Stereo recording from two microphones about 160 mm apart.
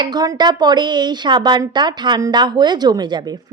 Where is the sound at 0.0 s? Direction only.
25° right (ahead or behind).